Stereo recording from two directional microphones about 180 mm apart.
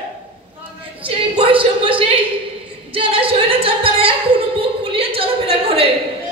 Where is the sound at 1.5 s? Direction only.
30° right (ahead or behind).